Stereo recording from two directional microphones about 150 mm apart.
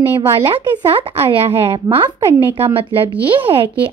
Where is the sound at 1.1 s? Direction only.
40° right (ahead or behind).